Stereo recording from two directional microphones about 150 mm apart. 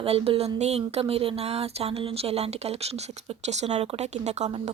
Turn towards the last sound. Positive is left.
turn(degrees=-50)  # may be behind; listen again after turning